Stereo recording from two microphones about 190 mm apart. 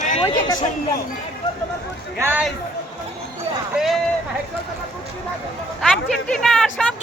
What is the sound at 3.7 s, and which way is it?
Speech, centre (ahead or behind).